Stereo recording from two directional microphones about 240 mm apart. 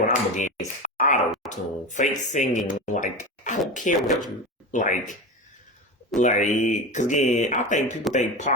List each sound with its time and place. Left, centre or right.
0.1 s speech: left
4.0 s speech: centre
4.7 s speech: left
6.1 s speech: left